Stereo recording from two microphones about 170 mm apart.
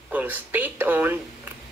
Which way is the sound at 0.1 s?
10° right (ahead or behind).